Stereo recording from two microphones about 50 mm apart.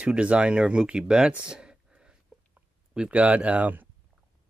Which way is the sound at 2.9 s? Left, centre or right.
Right.